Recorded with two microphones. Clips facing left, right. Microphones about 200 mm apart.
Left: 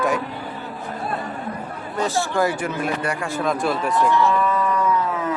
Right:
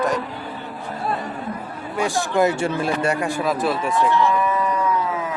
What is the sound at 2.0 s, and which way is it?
Speech, 15° right (ahead or behind).